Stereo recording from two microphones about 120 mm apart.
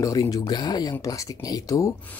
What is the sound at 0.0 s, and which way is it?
Speech, 30° left (ahead or behind).